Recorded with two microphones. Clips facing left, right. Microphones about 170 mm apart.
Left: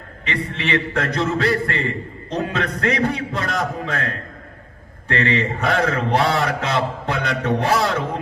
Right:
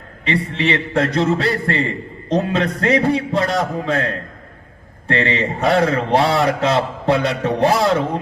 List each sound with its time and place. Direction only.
0.3 s a man's voice: 30° right (ahead or behind)